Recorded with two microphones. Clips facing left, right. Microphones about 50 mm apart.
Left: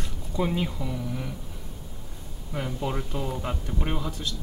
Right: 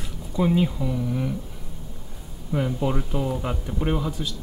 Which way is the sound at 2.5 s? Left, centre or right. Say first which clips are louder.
Right 6 dB; centre.